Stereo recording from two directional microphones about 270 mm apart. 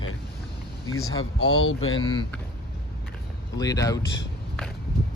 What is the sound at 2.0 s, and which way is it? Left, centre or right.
Speech, centre.